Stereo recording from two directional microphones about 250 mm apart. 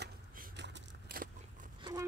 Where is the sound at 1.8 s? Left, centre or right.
Centre.